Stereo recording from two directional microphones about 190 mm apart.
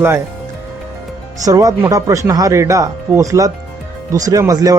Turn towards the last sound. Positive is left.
turn(degrees=-20)  # may be behind; listen again after turning